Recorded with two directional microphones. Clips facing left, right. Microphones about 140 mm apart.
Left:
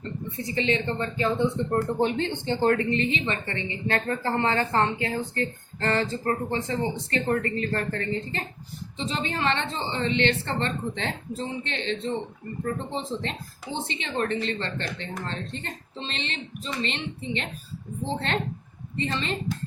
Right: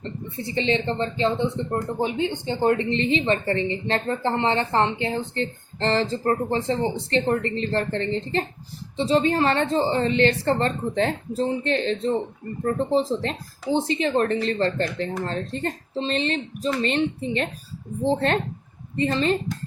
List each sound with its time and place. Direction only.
0.3 s a woman's voice: 30° right (ahead or behind)
1.7 s a woman's voice: 10° right (ahead or behind); by 17.5 s 45° right (ahead or behind)
18.9 s speech: 40° right (ahead or behind)